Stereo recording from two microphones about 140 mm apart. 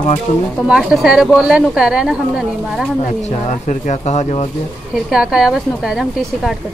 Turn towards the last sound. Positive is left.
turn(degrees=-5)  # may be behind; listen again after turning